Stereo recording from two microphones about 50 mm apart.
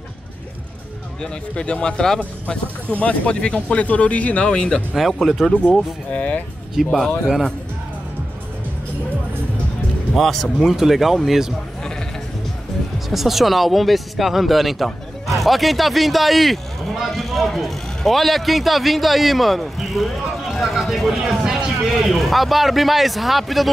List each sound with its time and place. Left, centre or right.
1.2 s speech: left
4.9 s speech: centre
5.5 s speech: left
6.7 s speech: centre
10.1 s speech: centre
13.1 s speech: centre